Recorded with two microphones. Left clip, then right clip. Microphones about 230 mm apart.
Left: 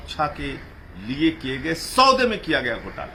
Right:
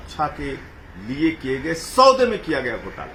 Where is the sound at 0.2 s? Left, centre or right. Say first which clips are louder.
Right 1 dB; left.